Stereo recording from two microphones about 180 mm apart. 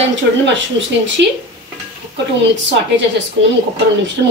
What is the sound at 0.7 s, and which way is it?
Speech, 90° right.